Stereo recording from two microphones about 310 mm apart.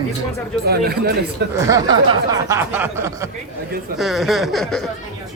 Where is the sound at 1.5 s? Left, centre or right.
Centre.